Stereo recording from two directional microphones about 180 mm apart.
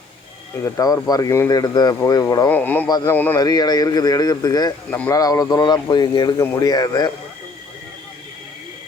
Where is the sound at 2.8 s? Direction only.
20° left (ahead or behind).